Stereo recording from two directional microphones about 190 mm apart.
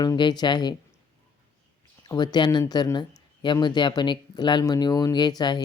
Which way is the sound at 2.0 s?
20° left (ahead or behind).